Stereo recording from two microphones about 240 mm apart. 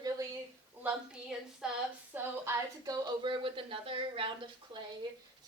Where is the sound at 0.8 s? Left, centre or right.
Centre; by 4.8 s right.